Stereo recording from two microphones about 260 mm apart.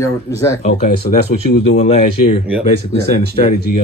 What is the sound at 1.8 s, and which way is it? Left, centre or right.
Speech, left.